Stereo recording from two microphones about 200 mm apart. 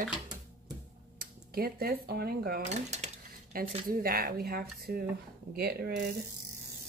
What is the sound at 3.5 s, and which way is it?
Speech, 45° right (ahead or behind).